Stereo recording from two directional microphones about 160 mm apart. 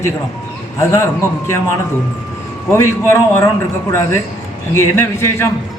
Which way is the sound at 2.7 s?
15° left (ahead or behind).